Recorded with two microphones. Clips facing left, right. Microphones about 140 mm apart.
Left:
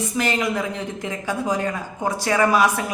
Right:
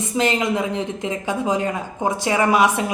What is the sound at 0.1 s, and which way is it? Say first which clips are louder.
Speech: right 5 dB; 20° right (ahead or behind).